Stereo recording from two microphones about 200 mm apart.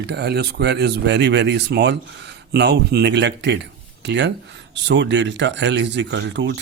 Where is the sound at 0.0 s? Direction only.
55° right (ahead or behind).